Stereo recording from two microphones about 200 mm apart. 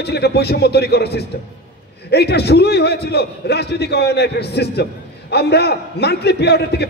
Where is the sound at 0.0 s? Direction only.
55° left (ahead or behind).